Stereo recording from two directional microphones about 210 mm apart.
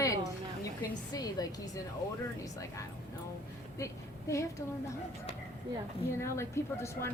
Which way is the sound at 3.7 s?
15° left (ahead or behind).